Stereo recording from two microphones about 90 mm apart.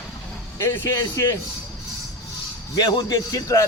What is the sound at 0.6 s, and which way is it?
Speech, 30° left (ahead or behind).